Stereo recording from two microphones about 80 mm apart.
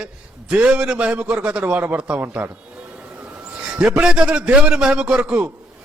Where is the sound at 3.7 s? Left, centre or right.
Centre.